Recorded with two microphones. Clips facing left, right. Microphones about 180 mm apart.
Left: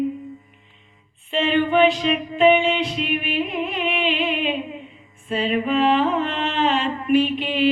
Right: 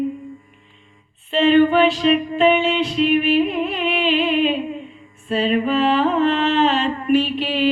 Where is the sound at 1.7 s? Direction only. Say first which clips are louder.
Right 1 dB; 15° left (ahead or behind).